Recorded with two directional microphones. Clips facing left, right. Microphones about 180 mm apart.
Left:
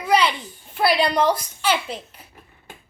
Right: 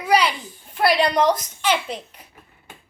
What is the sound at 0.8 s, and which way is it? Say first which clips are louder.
A woman's voice: right 1 dB; centre (ahead or behind).